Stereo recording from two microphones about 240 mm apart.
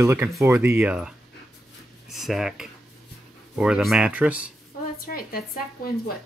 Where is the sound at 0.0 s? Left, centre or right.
Centre.